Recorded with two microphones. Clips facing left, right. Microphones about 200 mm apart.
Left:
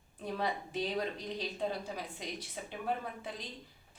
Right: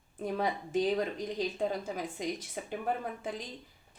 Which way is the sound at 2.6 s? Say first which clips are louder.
Right 3 dB; 50° right (ahead or behind).